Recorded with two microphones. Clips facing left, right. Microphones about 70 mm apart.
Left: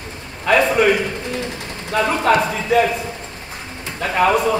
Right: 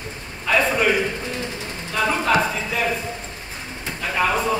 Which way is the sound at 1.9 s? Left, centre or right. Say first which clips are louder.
Left 4 dB; left.